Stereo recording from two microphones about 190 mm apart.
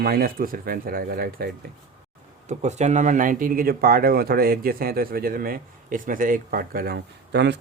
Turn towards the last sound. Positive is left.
turn(degrees=-65)  # may be behind; listen again after turning